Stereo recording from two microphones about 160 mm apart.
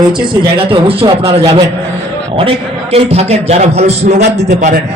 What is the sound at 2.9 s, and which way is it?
A man's voice, 40° right (ahead or behind).